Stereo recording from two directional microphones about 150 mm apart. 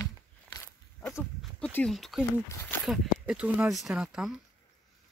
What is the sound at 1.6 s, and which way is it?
Speech, 10° left (ahead or behind).